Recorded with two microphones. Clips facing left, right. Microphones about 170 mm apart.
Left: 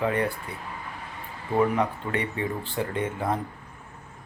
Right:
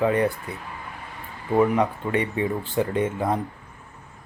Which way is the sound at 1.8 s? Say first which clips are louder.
Right 4 dB; 20° right (ahead or behind).